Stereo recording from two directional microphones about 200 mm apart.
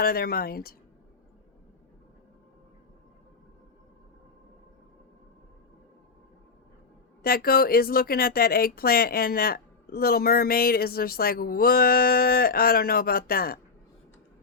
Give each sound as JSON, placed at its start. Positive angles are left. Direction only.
{"t": 0.0, "sound": "speech", "side_deg": 50}
{"t": 7.2, "sound": "speech", "side_deg": 50}